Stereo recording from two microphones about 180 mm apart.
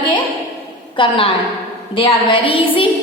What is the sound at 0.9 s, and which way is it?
A woman's voice, 30° left (ahead or behind).